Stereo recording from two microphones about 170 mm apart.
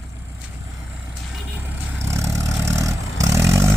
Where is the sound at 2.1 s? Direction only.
15° right (ahead or behind).